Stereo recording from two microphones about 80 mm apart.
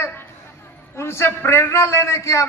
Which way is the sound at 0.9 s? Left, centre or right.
Left.